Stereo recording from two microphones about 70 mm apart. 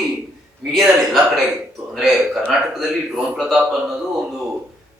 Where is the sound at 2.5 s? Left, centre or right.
Centre.